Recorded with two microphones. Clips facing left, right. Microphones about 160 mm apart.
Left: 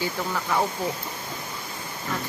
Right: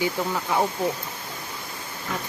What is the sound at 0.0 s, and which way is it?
Speech, 15° right (ahead or behind).